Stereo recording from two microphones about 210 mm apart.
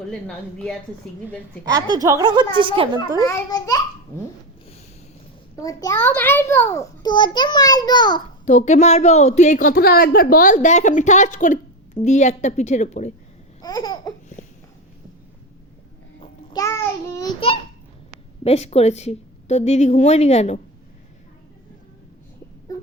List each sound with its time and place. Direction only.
0.1 s speech: 5° left (ahead or behind)
1.7 s a woman's voice: 15° right (ahead or behind)
3.2 s a child's voice: 15° left (ahead or behind)
5.5 s a child's voice: 15° left (ahead or behind)
8.4 s a woman's voice: 35° left (ahead or behind)
13.6 s babbling: 20° left (ahead or behind)
14.4 s a sound: 35° left (ahead or behind)
16.2 s babbling: 20° left (ahead or behind)
18.4 s a woman's voice: 30° left (ahead or behind)
22.7 s a sound: 15° left (ahead or behind)